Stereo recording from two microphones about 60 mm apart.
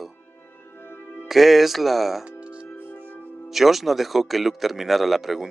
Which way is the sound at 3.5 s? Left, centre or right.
Centre.